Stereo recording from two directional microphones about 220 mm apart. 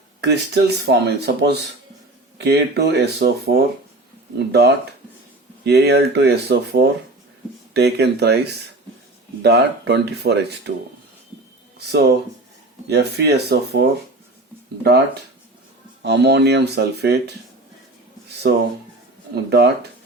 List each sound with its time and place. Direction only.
0.2 s speech: 50° right (ahead or behind)
9.4 s speech: 50° right (ahead or behind)
11.9 s speech: 50° right (ahead or behind)
16.0 s speech: 50° right (ahead or behind)
18.4 s speech: 50° right (ahead or behind)